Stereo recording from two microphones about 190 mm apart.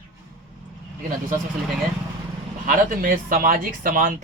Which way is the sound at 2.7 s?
45° right (ahead or behind).